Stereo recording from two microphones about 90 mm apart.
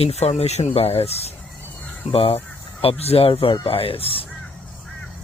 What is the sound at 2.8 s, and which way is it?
Speech, 90° left.